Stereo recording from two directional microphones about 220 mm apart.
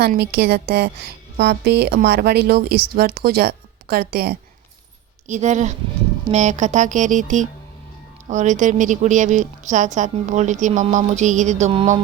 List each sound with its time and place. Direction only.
0.0 s a woman's voice: 45° right (ahead or behind)
5.3 s a woman's voice: 30° right (ahead or behind)